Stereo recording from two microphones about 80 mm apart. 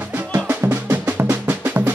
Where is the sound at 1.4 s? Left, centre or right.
Right.